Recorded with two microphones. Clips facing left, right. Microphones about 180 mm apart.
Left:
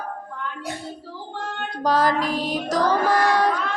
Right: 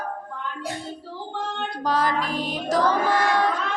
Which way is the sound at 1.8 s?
35° left (ahead or behind).